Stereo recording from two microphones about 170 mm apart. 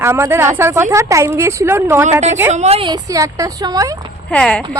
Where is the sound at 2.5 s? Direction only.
40° right (ahead or behind); by 4.0 s 20° right (ahead or behind).